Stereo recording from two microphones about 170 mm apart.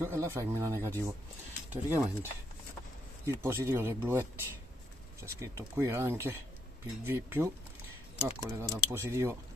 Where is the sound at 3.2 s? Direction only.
15° right (ahead or behind).